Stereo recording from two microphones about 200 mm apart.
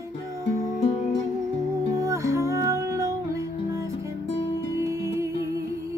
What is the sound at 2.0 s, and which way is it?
Music, 15° right (ahead or behind).